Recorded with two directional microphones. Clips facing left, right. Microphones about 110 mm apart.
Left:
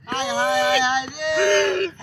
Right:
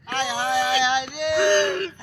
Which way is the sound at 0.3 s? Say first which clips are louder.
Left 4 dB; 50° left (ahead or behind).